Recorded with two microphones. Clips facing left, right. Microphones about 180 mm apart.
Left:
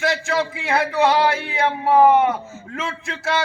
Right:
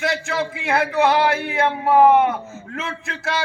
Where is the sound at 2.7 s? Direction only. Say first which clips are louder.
Left 2 dB; 55° right (ahead or behind).